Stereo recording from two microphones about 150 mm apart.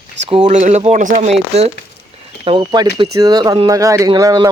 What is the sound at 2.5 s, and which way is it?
Speech, 30° right (ahead or behind).